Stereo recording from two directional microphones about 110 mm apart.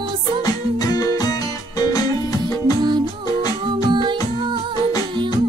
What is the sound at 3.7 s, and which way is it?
Music, 45° right (ahead or behind).